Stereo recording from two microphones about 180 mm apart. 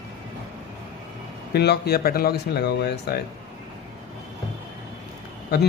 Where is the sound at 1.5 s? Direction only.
65° left (ahead or behind).